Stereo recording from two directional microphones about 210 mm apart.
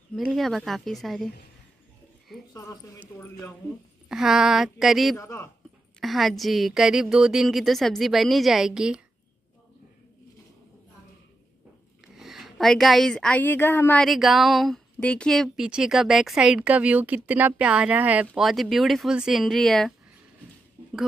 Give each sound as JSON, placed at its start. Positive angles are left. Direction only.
{"t": 0.1, "sound": "a woman's voice", "side_deg": 0}
{"t": 2.5, "sound": "speech", "side_deg": 15}
{"t": 4.1, "sound": "a woman's voice", "side_deg": 0}
{"t": 5.1, "sound": "speech", "side_deg": 15}
{"t": 5.9, "sound": "a woman's voice", "side_deg": 0}
{"t": 12.0, "sound": "a woman's voice", "side_deg": 0}